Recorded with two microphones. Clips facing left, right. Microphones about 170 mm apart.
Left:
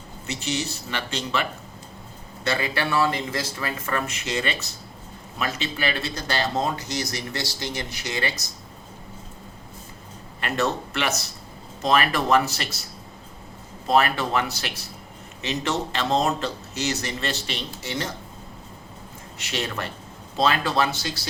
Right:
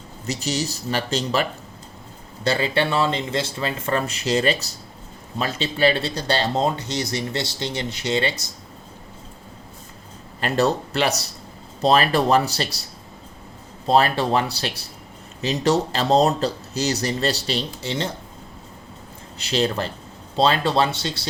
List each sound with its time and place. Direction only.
0.3 s speech: 40° right (ahead or behind)
10.4 s speech: 35° right (ahead or behind)
13.8 s speech: 30° right (ahead or behind)
19.4 s speech: 35° right (ahead or behind)